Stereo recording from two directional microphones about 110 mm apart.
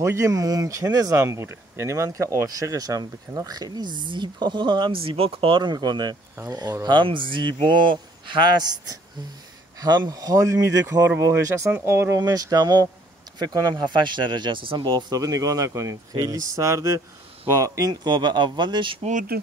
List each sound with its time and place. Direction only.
0.0 s speech: 30° right (ahead or behind); by 18.9 s 45° right (ahead or behind)